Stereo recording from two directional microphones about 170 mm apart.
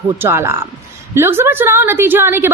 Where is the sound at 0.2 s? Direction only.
15° right (ahead or behind).